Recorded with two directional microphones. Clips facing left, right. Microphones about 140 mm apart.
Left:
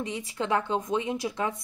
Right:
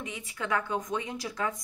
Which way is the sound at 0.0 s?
30° left (ahead or behind).